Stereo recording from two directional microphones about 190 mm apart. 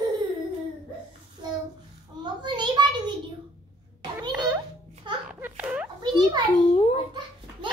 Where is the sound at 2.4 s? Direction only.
25° right (ahead or behind).